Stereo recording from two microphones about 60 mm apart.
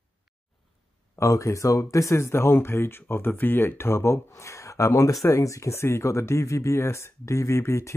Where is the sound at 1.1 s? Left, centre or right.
Left.